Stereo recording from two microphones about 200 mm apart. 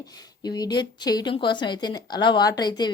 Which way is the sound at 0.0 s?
20° left (ahead or behind).